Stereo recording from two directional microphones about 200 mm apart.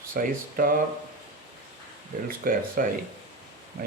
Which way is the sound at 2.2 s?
45° right (ahead or behind).